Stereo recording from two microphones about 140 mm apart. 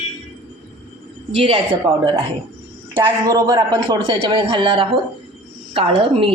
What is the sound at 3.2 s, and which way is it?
Speech, 25° right (ahead or behind).